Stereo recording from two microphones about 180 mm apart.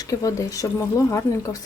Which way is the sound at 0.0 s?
20° left (ahead or behind).